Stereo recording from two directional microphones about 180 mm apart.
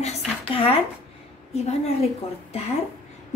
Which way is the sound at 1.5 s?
35° left (ahead or behind).